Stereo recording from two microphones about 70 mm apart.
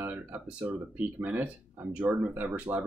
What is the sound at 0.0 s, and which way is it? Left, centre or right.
Speech, right.